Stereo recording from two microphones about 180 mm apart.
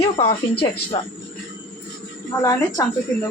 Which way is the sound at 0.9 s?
30° left (ahead or behind).